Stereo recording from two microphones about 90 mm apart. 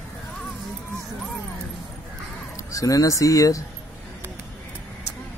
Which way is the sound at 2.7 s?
40° left (ahead or behind).